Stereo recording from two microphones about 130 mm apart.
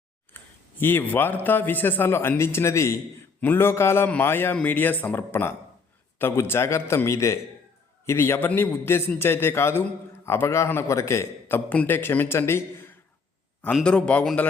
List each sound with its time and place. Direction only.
0.3 s a man's voice: 15° left (ahead or behind)
13.7 s a man's voice: 10° left (ahead or behind)